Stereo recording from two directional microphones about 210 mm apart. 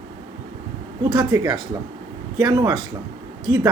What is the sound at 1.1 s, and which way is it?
A man's voice, 20° right (ahead or behind).